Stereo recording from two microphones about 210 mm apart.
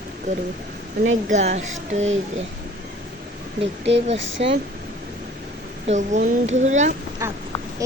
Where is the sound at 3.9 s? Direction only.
55° right (ahead or behind).